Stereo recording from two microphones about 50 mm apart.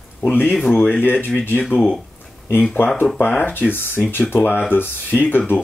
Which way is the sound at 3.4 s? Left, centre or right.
Left.